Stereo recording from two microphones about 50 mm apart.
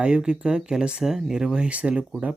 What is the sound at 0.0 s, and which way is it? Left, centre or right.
Speech, centre.